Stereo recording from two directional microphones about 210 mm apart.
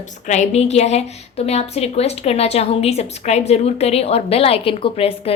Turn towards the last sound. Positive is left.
turn(degrees=25)  # may be behind; listen again after turning